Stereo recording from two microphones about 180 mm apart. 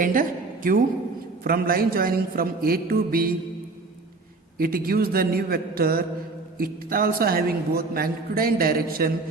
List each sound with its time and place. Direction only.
0.0 s a woman's voice: 50° right (ahead or behind)
4.5 s a man's voice: 55° right (ahead or behind)